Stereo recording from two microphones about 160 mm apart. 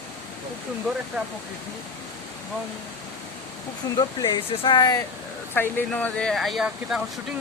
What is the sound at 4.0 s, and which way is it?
Speech, 25° left (ahead or behind).